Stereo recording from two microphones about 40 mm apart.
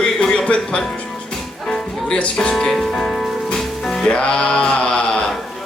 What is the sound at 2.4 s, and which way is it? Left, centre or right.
Speech, centre.